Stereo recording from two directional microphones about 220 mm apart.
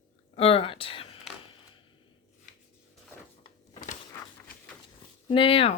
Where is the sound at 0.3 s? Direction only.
25° left (ahead or behind).